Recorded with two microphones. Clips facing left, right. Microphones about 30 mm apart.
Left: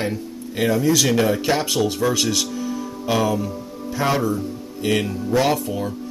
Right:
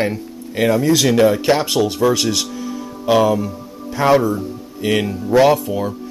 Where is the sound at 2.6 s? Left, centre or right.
Centre.